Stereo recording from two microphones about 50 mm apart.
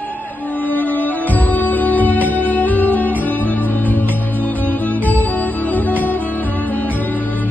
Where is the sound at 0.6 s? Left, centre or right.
Left.